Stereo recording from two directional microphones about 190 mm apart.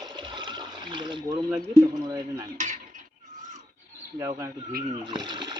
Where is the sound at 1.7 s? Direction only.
20° right (ahead or behind).